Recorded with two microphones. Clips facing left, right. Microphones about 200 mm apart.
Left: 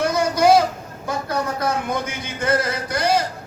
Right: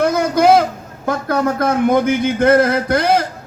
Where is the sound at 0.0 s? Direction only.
55° right (ahead or behind).